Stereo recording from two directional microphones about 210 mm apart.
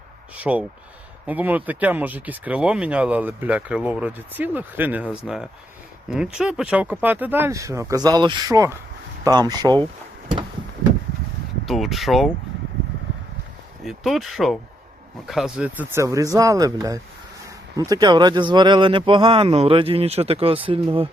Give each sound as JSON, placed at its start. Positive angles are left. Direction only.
{"t": 0.3, "sound": "speech", "side_deg": -5}
{"t": 11.6, "sound": "speech", "side_deg": 0}
{"t": 13.8, "sound": "speech", "side_deg": 0}